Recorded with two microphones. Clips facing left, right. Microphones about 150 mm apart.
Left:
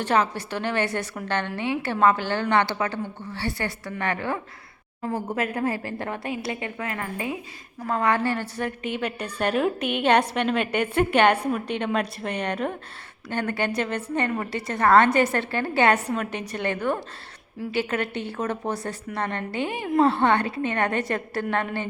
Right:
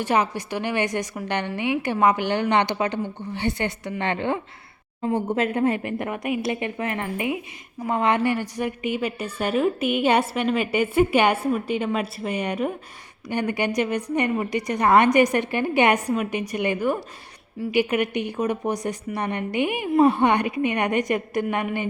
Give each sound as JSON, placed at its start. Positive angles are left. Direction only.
{"t": 0.0, "sound": "a woman's voice", "side_deg": -15}